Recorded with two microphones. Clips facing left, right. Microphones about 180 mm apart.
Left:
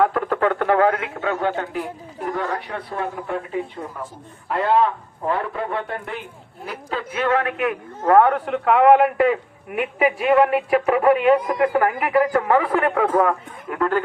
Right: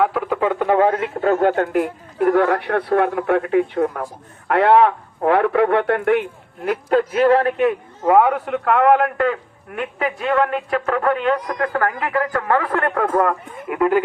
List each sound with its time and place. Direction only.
0.0 s radio: 5° right (ahead or behind); by 1.0 s 25° right (ahead or behind)
1.2 s speech: 45° right (ahead or behind); by 6.2 s 65° right (ahead or behind)
6.7 s a man's voice: 50° right (ahead or behind); by 7.8 s 30° right (ahead or behind)
8.0 s a man's voice: 10° right (ahead or behind)
13.7 s speech: 10° right (ahead or behind)